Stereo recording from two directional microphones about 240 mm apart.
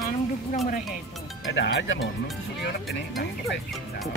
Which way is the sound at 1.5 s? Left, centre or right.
Left.